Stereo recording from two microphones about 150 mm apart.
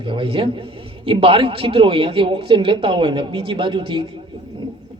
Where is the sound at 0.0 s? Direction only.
35° right (ahead or behind).